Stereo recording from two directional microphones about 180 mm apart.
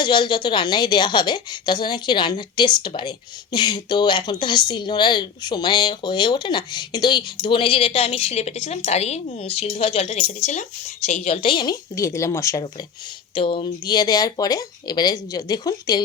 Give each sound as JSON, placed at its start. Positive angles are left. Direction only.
{"t": 0.0, "sound": "a woman's voice", "side_deg": 25}
{"t": 13.3, "sound": "a woman's voice", "side_deg": 30}